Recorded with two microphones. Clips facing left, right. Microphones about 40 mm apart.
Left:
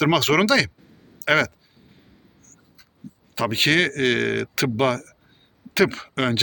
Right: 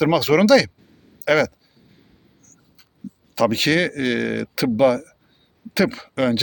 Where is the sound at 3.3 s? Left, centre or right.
Left.